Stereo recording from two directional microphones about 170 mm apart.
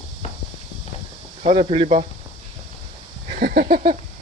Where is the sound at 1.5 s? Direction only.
35° right (ahead or behind).